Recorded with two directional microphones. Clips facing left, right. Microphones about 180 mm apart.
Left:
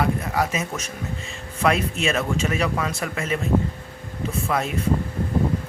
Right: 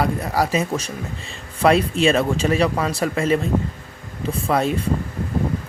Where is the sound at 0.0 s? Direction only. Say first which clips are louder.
Right 2 dB; 35° right (ahead or behind).